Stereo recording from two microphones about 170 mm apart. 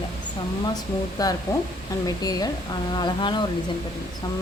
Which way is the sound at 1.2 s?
20° left (ahead or behind).